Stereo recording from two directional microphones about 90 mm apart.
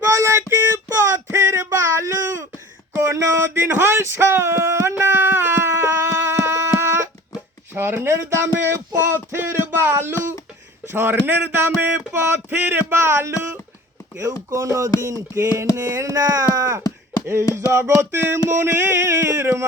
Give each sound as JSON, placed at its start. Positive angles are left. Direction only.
{"t": 0.1, "sound": "a sound", "side_deg": -35}
{"t": 10.8, "sound": "speech", "side_deg": -25}
{"t": 14.5, "sound": "music", "side_deg": -35}